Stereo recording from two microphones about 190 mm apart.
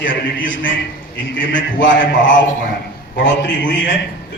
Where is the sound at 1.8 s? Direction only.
75° left (ahead or behind).